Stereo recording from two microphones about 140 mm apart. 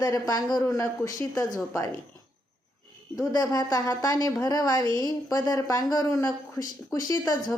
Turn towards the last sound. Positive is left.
turn(degrees=25)  # may be behind; listen again after turning